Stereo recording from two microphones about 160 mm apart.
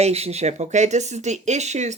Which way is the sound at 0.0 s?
40° right (ahead or behind).